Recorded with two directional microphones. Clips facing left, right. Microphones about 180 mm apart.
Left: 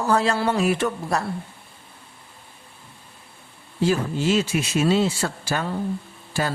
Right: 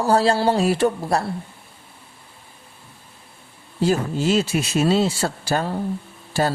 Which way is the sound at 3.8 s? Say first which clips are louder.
Right 2 dB; 40° right (ahead or behind).